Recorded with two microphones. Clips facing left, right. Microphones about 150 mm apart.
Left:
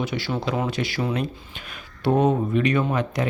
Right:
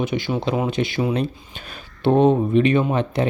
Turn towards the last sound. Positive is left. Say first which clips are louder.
# right 3 dB
turn(degrees=-30)  # may be behind; listen again after turning